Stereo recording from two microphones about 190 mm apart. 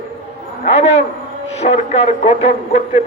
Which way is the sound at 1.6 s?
35° left (ahead or behind).